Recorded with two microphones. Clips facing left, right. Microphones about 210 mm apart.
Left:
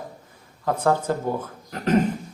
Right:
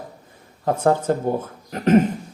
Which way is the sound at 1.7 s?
20° right (ahead or behind).